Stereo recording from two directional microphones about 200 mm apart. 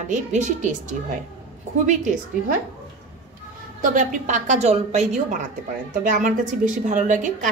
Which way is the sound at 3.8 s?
40° right (ahead or behind).